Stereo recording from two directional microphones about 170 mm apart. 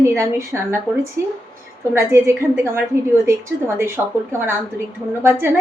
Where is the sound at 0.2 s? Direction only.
15° right (ahead or behind).